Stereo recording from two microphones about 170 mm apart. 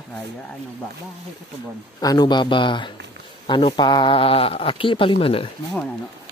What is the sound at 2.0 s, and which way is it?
Speech, 25° left (ahead or behind).